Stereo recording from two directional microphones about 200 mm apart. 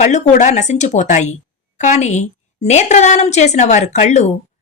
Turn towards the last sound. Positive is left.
turn(degrees=35)  # may be behind; listen again after turning